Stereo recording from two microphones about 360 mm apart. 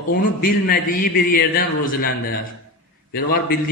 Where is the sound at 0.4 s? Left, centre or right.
Left.